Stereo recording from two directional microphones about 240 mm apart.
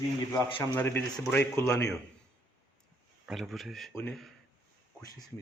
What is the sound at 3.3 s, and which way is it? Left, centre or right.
Speech, centre.